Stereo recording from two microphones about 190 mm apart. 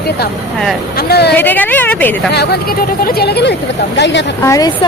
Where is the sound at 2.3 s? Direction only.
60° left (ahead or behind).